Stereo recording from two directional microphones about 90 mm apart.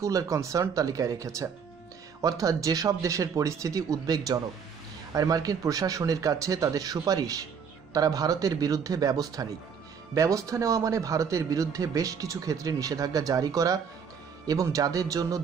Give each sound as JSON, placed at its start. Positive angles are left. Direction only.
{"t": 0.0, "sound": "a man's voice", "side_deg": -40}